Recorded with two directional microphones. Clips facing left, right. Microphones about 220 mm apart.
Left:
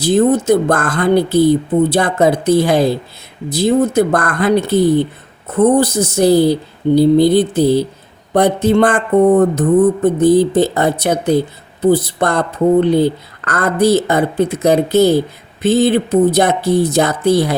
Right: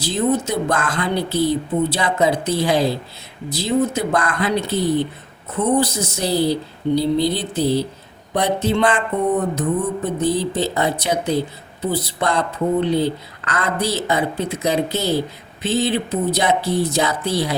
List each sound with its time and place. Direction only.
0.0 s speech: 50° left (ahead or behind)